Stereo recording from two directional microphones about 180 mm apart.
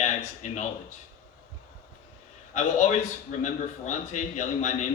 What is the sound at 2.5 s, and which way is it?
A man's voice, 40° left (ahead or behind).